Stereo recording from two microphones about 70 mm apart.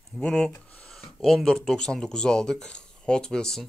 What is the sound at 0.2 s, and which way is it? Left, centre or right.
Speech, centre.